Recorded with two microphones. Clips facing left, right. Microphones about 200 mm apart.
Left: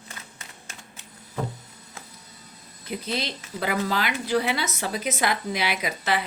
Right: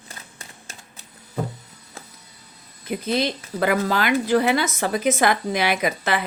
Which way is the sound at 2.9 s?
50° right (ahead or behind).